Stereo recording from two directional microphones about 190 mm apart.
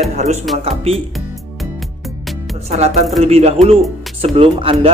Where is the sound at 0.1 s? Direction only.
35° right (ahead or behind).